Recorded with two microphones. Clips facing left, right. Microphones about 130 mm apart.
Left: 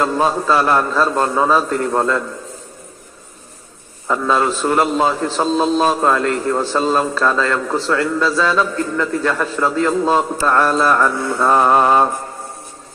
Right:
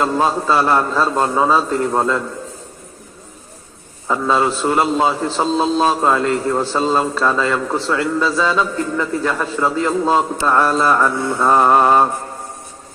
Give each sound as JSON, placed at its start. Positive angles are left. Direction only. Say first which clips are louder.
{"t": 0.0, "sound": "a man's voice", "louder": "even", "side_deg": -10}
{"t": 4.1, "sound": "a man's voice", "louder": "even", "side_deg": -10}
{"t": 11.1, "sound": "mantra", "louder": "even", "side_deg": -20}
{"t": 11.5, "sound": "a man's voice", "louder": "right 1 dB", "side_deg": -10}